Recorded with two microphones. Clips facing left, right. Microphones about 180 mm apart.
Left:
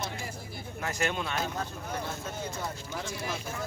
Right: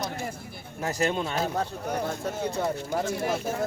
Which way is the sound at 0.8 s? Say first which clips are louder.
Right 5 dB; 35° right (ahead or behind).